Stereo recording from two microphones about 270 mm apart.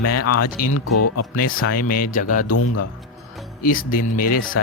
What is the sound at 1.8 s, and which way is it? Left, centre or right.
Speech, left.